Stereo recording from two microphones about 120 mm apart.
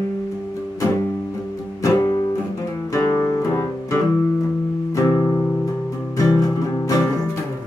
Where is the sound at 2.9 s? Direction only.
25° left (ahead or behind).